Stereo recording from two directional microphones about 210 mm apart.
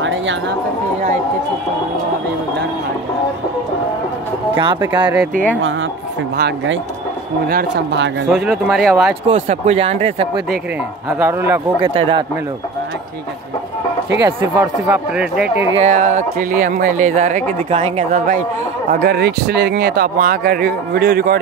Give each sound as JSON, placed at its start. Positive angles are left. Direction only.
{"t": 0.0, "sound": "a sound", "side_deg": -65}
{"t": 4.7, "sound": "speech", "side_deg": -20}
{"t": 5.6, "sound": "speech", "side_deg": -65}
{"t": 8.3, "sound": "speech", "side_deg": 0}
{"t": 9.3, "sound": "speech", "side_deg": -30}
{"t": 11.1, "sound": "speech", "side_deg": -10}
{"t": 11.8, "sound": "speech", "side_deg": -25}
{"t": 14.2, "sound": "speech", "side_deg": -10}
{"t": 15.8, "sound": "speech", "side_deg": -35}
{"t": 19.1, "sound": "speech", "side_deg": -50}